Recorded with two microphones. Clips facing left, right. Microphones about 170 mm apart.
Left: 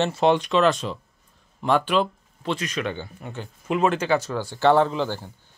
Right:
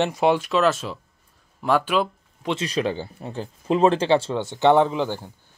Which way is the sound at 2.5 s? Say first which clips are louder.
Right 3 dB; 30° right (ahead or behind).